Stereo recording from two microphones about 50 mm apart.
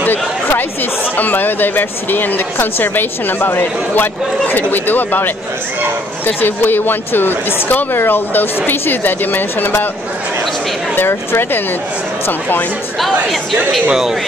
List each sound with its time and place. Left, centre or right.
1.1 s speech: left
11.0 s speech: left
13.0 s speech: centre